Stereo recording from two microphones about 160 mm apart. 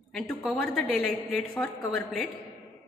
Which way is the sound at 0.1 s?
5° left (ahead or behind).